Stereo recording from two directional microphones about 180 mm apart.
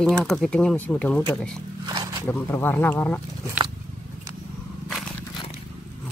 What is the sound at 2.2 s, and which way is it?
Speech, 10° left (ahead or behind).